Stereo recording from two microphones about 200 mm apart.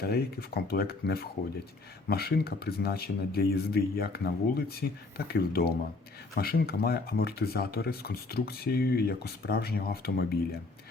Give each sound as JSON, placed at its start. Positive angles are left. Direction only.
{"t": 0.0, "sound": "speech", "side_deg": 50}